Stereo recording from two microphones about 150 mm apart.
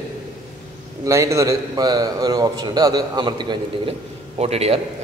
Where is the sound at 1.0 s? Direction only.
20° right (ahead or behind).